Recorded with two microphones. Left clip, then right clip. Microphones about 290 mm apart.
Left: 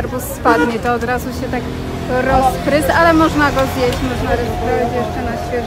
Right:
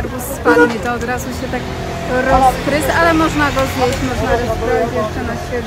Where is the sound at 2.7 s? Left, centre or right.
Centre.